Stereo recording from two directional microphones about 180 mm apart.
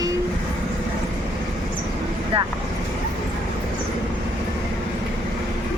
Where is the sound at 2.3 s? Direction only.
30° right (ahead or behind).